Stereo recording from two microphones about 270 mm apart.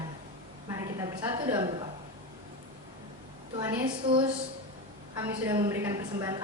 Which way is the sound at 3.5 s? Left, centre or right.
Centre.